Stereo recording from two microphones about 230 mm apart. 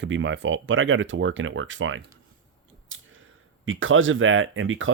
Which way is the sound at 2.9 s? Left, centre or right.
Right.